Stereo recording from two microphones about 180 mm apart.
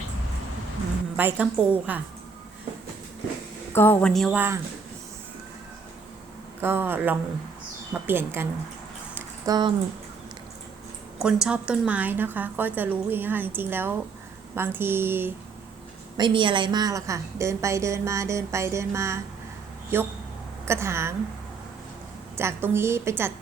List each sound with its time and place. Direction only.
1.1 s a woman's voice: 10° right (ahead or behind)
3.7 s speech: 10° left (ahead or behind)
4.4 s a woman's voice: 15° right (ahead or behind)
6.6 s a woman's voice: 10° right (ahead or behind)
9.1 s a sound: 25° right (ahead or behind)
11.2 s a woman's voice: 5° right (ahead or behind)
16.1 s a woman's voice: 25° right (ahead or behind)
22.4 s a woman's voice: 15° right (ahead or behind)